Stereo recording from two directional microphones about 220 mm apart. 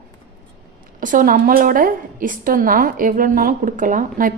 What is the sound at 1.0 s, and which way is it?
A woman's voice, 40° right (ahead or behind).